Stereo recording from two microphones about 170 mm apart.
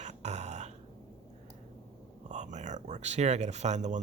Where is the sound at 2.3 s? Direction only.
45° right (ahead or behind).